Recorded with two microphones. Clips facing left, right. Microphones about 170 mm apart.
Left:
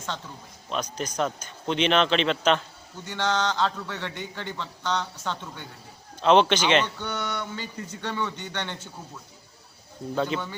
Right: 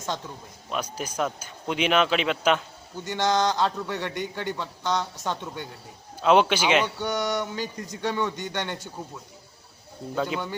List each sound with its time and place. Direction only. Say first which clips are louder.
0.7 s a man's voice: left 1 dB; 10° right (ahead or behind)
7.3 s mantra: right 5 dB; 40° right (ahead or behind)
8.0 s a man's voice: right 4 dB; 10° right (ahead or behind)
10.2 s a man's voice: left 1 dB; 10° right (ahead or behind)